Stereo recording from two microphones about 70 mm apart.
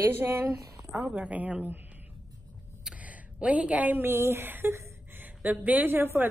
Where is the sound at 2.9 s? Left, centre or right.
Right.